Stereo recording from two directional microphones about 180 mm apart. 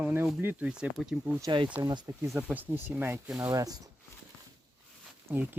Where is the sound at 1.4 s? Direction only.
25° right (ahead or behind).